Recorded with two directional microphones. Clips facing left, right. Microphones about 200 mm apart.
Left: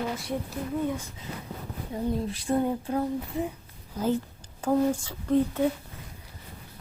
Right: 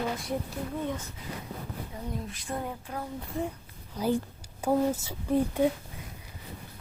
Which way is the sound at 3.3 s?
Centre (ahead or behind).